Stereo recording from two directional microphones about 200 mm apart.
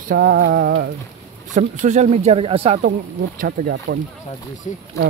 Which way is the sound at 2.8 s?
50° right (ahead or behind).